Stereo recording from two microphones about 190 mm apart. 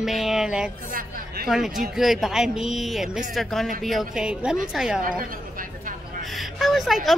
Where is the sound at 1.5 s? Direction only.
Centre (ahead or behind).